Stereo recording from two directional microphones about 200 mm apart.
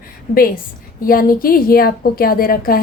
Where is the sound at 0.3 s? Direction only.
45° left (ahead or behind).